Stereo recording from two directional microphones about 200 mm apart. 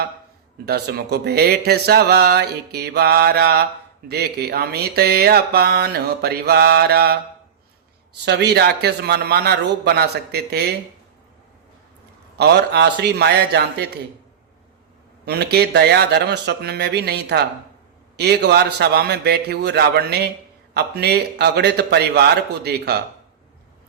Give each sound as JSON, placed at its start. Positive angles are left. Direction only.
{"t": 0.6, "sound": "speech", "side_deg": -55}
{"t": 8.2, "sound": "speech", "side_deg": -55}
{"t": 12.4, "sound": "a man's voice", "side_deg": -55}
{"t": 15.2, "sound": "a man's voice", "side_deg": -55}